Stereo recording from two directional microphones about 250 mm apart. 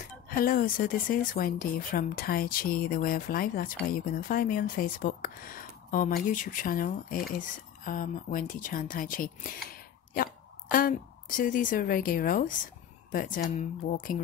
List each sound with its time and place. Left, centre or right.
0.3 s a woman's voice: left